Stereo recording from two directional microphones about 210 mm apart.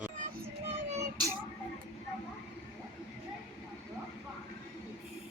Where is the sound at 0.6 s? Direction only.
30° right (ahead or behind).